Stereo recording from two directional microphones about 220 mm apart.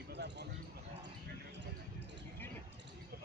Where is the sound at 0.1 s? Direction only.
50° right (ahead or behind).